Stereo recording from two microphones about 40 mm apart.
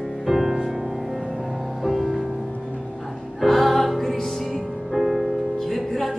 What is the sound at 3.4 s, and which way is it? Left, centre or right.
Music, centre.